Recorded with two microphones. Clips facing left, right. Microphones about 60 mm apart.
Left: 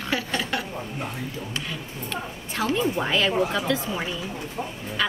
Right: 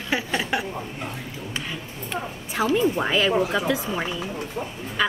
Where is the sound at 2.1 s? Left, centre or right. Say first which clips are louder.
Right 3 dB; centre.